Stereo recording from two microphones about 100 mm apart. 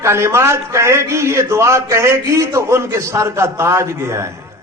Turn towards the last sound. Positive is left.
turn(degrees=-25)  # may be behind; listen again after turning